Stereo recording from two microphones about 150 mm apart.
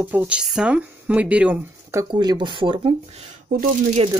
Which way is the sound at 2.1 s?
30° right (ahead or behind).